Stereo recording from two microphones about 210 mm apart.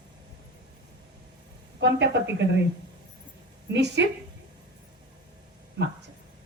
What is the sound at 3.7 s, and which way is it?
Speech, 55° right (ahead or behind).